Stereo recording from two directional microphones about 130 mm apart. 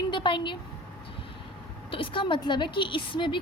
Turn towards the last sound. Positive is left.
turn(degrees=40)  # may be behind; listen again after turning